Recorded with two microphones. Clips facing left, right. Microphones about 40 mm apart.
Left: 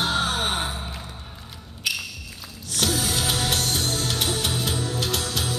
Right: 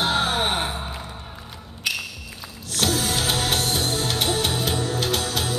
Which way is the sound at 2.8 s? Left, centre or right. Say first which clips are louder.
Right 2 dB; centre.